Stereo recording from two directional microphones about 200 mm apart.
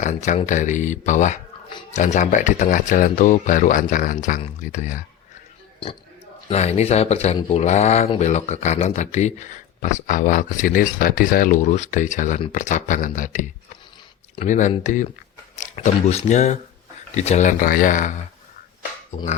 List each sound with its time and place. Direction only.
0.0 s speech: 40° left (ahead or behind)
6.5 s speech: 35° left (ahead or behind)